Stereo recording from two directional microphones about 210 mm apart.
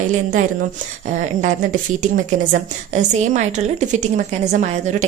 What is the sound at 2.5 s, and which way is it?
A woman's voice, 35° right (ahead or behind).